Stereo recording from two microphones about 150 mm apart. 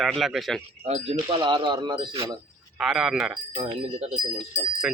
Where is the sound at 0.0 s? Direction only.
Centre (ahead or behind).